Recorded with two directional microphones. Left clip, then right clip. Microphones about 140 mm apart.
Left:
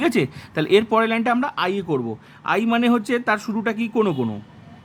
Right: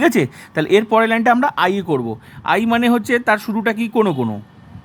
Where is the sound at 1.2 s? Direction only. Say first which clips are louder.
Right 7 dB; 30° right (ahead or behind); by 3.7 s 15° right (ahead or behind).